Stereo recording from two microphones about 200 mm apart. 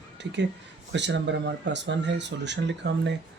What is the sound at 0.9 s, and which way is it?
Speech, 60° right (ahead or behind).